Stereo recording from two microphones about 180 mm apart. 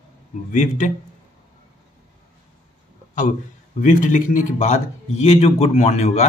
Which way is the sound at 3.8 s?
45° left (ahead or behind).